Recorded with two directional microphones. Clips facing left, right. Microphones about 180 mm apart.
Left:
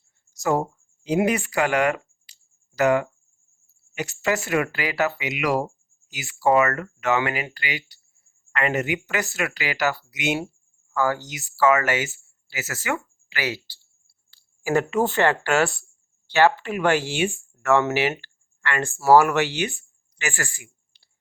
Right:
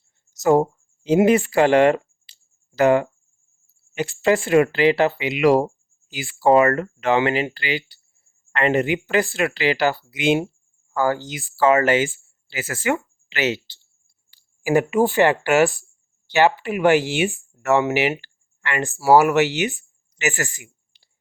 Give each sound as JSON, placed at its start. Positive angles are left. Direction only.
{"t": 0.3, "sound": "speech", "side_deg": -25}